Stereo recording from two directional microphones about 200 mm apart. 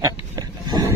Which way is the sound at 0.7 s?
15° right (ahead or behind).